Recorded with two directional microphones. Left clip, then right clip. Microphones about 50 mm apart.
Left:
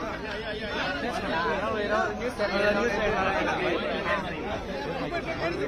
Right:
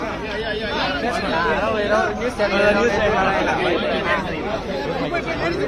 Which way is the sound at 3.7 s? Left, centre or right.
Left.